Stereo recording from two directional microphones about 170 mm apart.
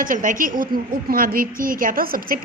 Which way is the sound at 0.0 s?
50° right (ahead or behind).